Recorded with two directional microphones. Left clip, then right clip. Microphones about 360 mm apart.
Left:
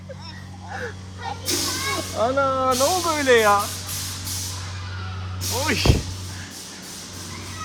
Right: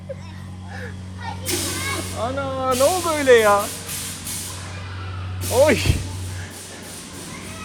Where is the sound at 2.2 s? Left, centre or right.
Left.